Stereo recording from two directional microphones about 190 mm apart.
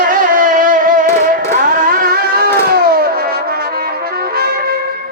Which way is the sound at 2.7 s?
55° right (ahead or behind).